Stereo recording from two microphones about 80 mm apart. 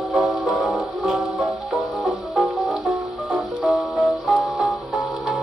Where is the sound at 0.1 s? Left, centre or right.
Centre.